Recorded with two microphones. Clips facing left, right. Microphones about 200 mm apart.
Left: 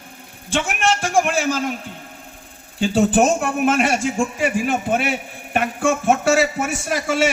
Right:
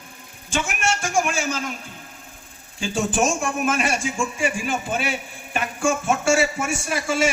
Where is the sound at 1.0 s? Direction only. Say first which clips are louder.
Left 4 dB; 60° left (ahead or behind).